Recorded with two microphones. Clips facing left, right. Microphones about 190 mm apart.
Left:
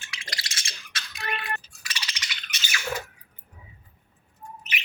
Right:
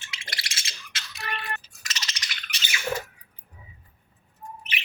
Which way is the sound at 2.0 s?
35° right (ahead or behind).